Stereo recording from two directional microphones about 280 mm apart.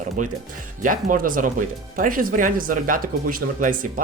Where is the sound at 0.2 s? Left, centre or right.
Right.